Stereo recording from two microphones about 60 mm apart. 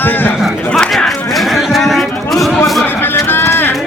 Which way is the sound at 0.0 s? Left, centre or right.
Left.